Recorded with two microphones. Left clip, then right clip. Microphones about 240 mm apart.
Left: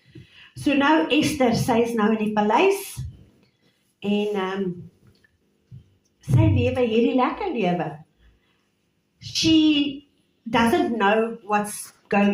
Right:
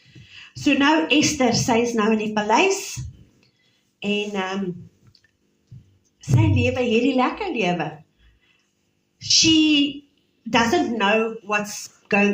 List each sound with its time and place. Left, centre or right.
0.0 s a woman's voice: right
4.0 s a woman's voice: right
6.1 s a woman's voice: right
9.1 s a sound: right
10.5 s a woman's voice: right